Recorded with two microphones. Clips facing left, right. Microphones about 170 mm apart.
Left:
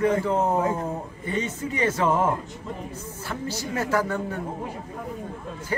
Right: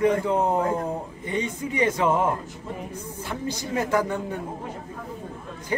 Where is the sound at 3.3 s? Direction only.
15° right (ahead or behind).